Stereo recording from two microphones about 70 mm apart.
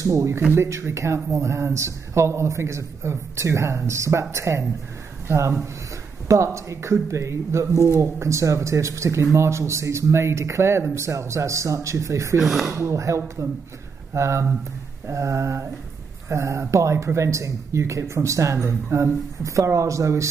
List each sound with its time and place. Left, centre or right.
0.0 s speech: right
0.4 s speech: right
12.4 s speech: centre
12.7 s speech: right